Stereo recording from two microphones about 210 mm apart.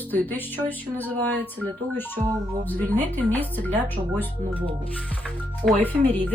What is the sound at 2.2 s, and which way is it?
Speech, 20° right (ahead or behind).